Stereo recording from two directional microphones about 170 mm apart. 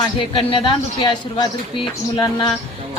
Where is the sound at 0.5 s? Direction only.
30° left (ahead or behind).